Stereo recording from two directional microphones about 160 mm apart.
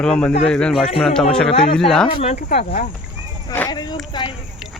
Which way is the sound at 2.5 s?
90° left.